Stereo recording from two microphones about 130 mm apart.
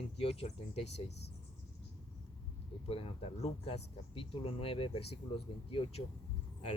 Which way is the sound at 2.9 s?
50° left (ahead or behind).